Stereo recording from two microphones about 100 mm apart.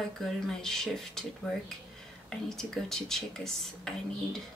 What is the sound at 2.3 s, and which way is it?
Speech, 5° left (ahead or behind).